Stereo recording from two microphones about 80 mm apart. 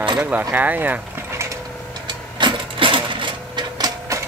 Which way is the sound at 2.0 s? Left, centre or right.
Right.